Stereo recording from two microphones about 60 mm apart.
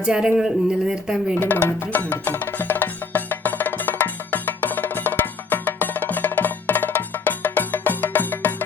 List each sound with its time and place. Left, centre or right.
0.0 s speech: centre
1.4 s music: left